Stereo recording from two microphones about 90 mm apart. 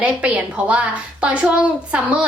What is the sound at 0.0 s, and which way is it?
A woman's voice, 15° right (ahead or behind).